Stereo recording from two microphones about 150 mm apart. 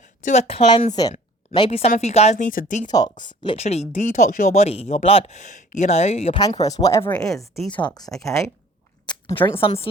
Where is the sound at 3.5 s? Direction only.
45° left (ahead or behind).